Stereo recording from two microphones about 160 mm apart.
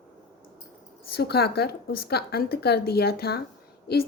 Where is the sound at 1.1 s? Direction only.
80° left.